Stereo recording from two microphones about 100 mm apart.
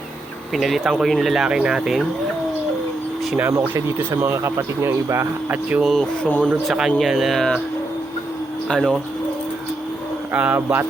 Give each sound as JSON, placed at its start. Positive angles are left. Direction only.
{"t": 0.5, "sound": "speech", "side_deg": 0}
{"t": 3.3, "sound": "speech", "side_deg": -20}
{"t": 5.8, "sound": "speech", "side_deg": 0}
{"t": 6.2, "sound": "speech", "side_deg": 15}
{"t": 6.7, "sound": "speech", "side_deg": -5}
{"t": 8.6, "sound": "speech", "side_deg": 5}
{"t": 10.3, "sound": "speech", "side_deg": -15}